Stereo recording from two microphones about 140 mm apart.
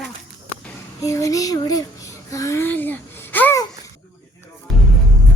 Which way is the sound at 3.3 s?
15° left (ahead or behind).